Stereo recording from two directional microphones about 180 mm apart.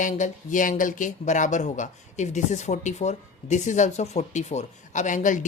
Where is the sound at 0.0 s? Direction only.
45° left (ahead or behind).